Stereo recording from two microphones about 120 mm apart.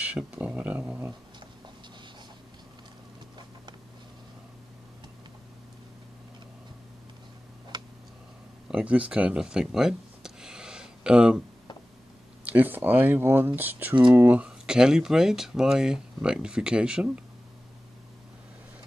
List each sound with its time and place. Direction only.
0.0 s speech: 10° right (ahead or behind)
7.7 s tick: 35° right (ahead or behind)
8.6 s a sound: 10° right (ahead or behind)
12.4 s speech: 15° right (ahead or behind)